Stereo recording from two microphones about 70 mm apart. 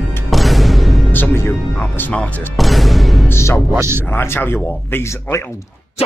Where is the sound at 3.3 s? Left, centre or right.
Left.